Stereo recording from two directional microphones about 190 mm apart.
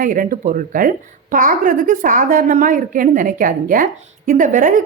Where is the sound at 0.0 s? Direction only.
45° right (ahead or behind).